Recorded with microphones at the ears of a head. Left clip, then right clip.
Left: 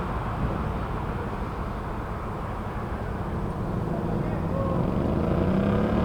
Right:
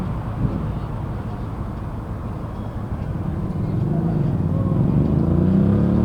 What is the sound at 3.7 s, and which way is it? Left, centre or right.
Vehicle, right.